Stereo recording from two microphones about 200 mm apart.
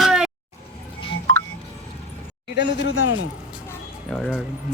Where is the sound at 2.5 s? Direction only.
60° left (ahead or behind).